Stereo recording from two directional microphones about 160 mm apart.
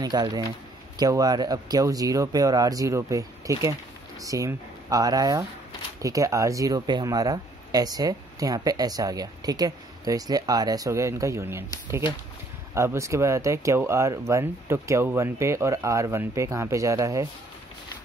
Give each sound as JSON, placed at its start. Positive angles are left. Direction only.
{"t": 0.0, "sound": "speech", "side_deg": -25}